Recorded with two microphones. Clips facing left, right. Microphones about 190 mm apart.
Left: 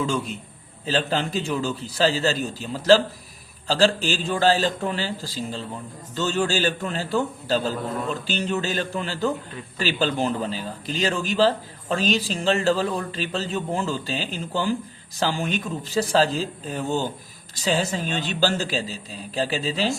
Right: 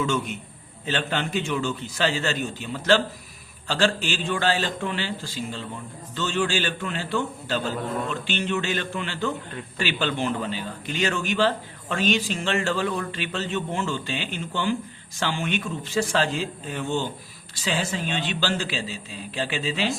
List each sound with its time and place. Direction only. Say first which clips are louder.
0.0 s a man's voice: even; 35° left (ahead or behind)